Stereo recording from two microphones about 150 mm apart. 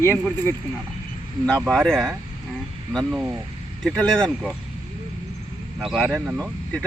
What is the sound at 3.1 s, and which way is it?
Speech, 10° right (ahead or behind).